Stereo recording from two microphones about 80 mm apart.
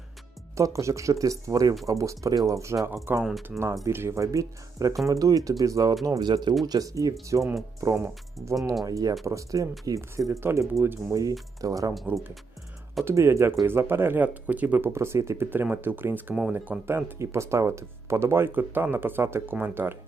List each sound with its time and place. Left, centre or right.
0.5 s speech: right
3.2 s speech: centre
3.8 s speech: right
6.2 s speech: right
6.7 s speech: right
8.4 s speech: centre
8.8 s speech: right
13.1 s speech: right
14.9 s speech: right
15.4 s speech: right